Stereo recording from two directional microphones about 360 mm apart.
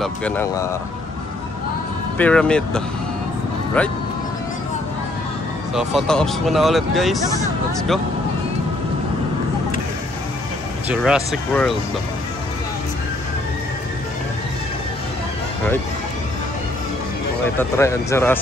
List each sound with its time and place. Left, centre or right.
0.0 s speech: centre
2.1 s speech: centre
5.8 s speech: centre
10.9 s speech: centre
17.6 s speech: centre